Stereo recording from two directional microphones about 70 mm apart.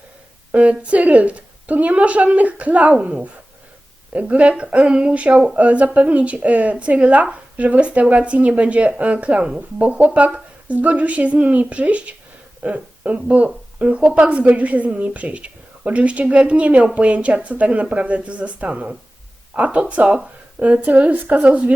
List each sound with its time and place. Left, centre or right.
0.5 s speech: centre